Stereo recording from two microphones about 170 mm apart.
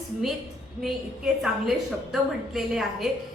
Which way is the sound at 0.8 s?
Centre (ahead or behind).